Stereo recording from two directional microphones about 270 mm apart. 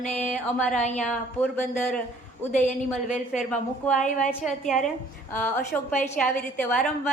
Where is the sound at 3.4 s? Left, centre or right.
Centre.